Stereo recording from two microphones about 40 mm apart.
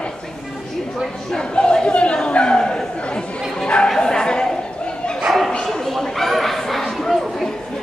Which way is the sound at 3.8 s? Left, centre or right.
Centre.